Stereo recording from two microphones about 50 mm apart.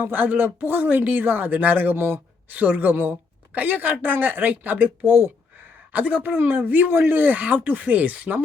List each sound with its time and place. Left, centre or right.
0.0 s speech: right
2.5 s speech: right
6.9 s speech: right